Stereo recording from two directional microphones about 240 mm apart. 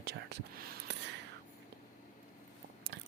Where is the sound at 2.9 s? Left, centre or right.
Right.